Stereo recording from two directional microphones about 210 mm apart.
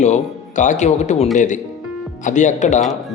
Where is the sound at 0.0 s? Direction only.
35° left (ahead or behind).